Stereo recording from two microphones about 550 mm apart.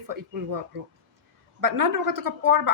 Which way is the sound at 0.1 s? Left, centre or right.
Right.